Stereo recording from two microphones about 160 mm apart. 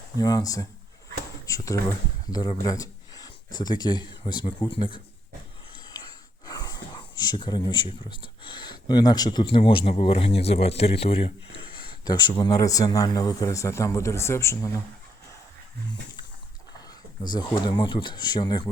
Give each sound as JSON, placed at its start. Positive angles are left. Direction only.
{"t": 0.2, "sound": "speech", "side_deg": 25}
{"t": 1.5, "sound": "a sound", "side_deg": 20}
{"t": 2.2, "sound": "speech", "side_deg": 25}
{"t": 6.4, "sound": "speech", "side_deg": 25}
{"t": 17.2, "sound": "speech", "side_deg": 30}